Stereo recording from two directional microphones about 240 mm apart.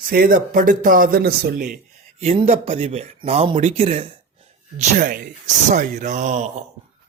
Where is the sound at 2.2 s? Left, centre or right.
Right.